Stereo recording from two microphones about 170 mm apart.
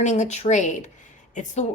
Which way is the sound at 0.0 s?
45° left (ahead or behind).